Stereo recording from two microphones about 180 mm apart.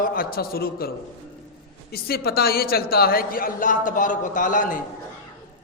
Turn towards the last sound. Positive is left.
turn(degrees=45)  # may be behind; listen again after turning